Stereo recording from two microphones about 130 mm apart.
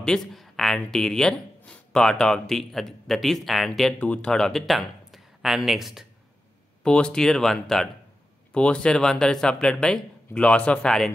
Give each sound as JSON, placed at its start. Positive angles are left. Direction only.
{"t": 0.0, "sound": "speech", "side_deg": 5}